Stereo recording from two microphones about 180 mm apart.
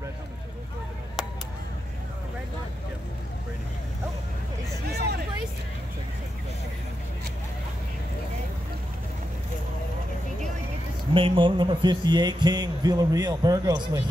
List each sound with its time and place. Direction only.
4.8 s hubbub: 65° right (ahead or behind)
11.1 s a man's voice: 30° right (ahead or behind)